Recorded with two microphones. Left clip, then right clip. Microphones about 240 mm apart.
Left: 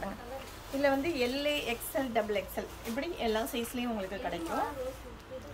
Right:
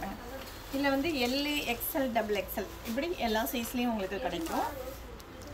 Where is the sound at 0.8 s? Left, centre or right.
Centre.